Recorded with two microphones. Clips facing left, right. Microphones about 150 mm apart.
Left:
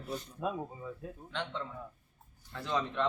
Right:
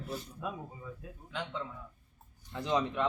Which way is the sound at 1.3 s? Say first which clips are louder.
Even; 5° right (ahead or behind).